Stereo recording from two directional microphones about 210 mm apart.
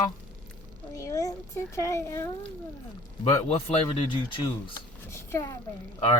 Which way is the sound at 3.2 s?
30° left (ahead or behind).